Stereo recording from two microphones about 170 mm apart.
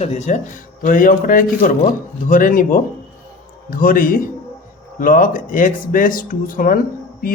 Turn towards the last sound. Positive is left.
turn(degrees=60)  # may be behind; listen again after turning